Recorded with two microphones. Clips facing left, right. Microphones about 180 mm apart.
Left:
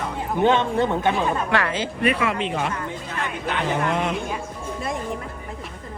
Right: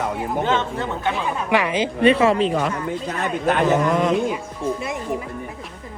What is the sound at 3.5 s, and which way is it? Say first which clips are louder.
Speech: right 6 dB; 50° right (ahead or behind).